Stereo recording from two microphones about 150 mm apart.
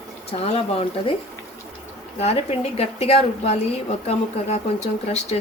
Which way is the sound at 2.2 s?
45° left (ahead or behind).